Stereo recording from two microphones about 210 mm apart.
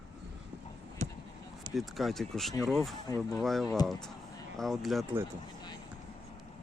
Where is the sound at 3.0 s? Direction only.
15° left (ahead or behind).